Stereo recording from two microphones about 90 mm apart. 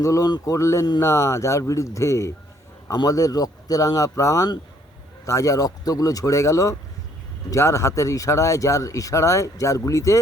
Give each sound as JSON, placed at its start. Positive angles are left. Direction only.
{"t": 0.0, "sound": "speech", "side_deg": 40}
{"t": 0.5, "sound": "speech", "side_deg": 35}